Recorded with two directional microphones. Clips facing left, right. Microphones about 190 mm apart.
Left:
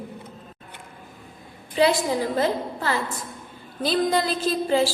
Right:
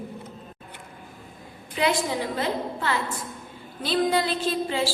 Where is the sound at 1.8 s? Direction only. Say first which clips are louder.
Left 4 dB; 35° left (ahead or behind).